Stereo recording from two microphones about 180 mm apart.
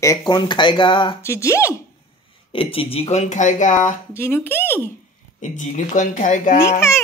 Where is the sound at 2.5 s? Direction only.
30° left (ahead or behind).